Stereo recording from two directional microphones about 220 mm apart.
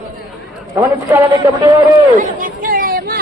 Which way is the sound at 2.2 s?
35° right (ahead or behind).